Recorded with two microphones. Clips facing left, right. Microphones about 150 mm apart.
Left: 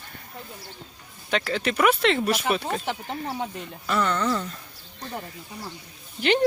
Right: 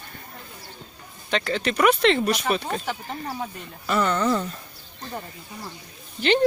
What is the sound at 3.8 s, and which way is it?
Speech, 10° right (ahead or behind).